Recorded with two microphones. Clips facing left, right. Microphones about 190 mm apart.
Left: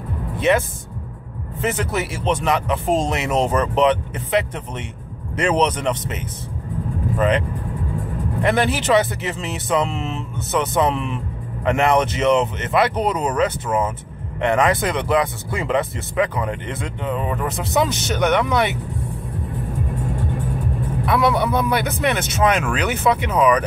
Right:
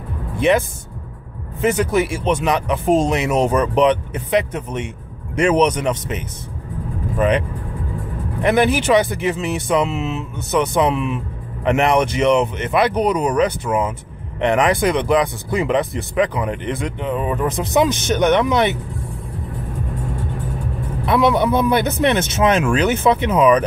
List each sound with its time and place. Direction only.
0.4 s speech: 15° right (ahead or behind)
21.0 s speech: 25° right (ahead or behind)